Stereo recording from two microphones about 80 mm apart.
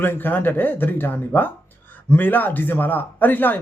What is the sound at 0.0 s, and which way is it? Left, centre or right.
Speech, left.